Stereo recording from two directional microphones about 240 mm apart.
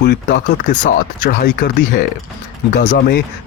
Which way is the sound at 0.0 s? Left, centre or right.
Left.